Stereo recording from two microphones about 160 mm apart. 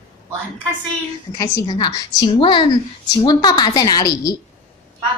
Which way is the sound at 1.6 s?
25° left (ahead or behind).